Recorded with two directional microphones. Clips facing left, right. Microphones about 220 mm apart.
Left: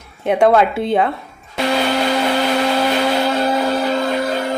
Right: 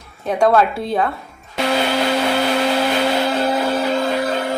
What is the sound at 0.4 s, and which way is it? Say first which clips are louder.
Speech: left 1 dB; 20° left (ahead or behind).